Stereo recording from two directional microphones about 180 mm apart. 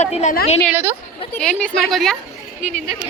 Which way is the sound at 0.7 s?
15° right (ahead or behind).